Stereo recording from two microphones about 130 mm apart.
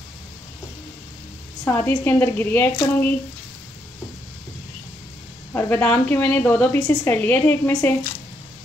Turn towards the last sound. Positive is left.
turn(degrees=15)  # may be behind; listen again after turning